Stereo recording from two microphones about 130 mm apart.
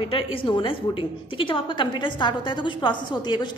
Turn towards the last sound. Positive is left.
turn(degrees=35)  # may be behind; listen again after turning